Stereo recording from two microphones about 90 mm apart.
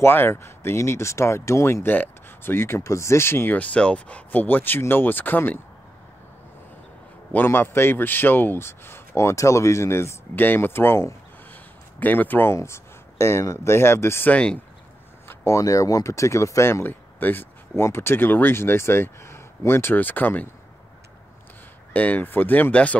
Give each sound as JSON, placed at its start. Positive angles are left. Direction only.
{"t": 0.0, "sound": "speech", "side_deg": 25}
{"t": 7.3, "sound": "speech", "side_deg": 25}
{"t": 14.3, "sound": "speech", "side_deg": 10}
{"t": 15.2, "sound": "speech", "side_deg": 35}
{"t": 21.9, "sound": "speech", "side_deg": 15}